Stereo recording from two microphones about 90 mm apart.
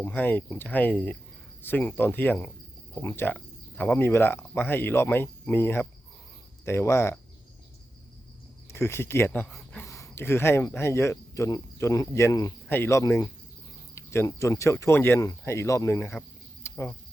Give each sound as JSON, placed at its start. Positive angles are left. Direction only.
{"t": 0.0, "sound": "speech", "side_deg": 20}
{"t": 8.7, "sound": "speech", "side_deg": 30}
{"t": 16.2, "sound": "speech", "side_deg": 25}
{"t": 16.6, "sound": "cricket", "side_deg": 25}